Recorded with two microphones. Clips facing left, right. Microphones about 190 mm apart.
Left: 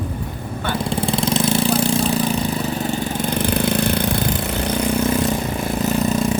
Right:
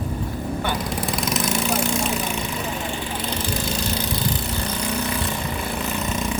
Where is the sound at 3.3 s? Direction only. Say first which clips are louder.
Left 9 dB; 60° left (ahead or behind).